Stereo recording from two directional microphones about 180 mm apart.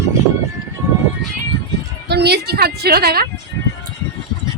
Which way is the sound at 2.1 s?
65° right (ahead or behind).